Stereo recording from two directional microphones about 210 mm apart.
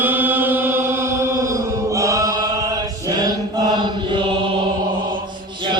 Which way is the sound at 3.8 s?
25° right (ahead or behind).